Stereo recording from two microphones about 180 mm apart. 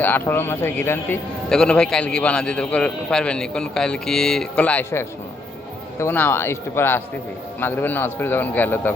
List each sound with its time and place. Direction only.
0.0 s a man's voice: 10° left (ahead or behind)